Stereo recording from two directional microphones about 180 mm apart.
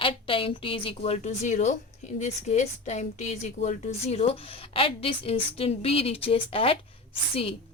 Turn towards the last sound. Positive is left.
turn(degrees=30)  # may be behind; listen again after turning